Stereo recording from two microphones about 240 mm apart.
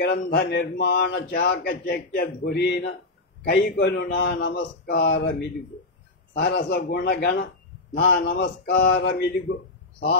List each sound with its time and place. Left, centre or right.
0.0 s speech: left
6.3 s speech: left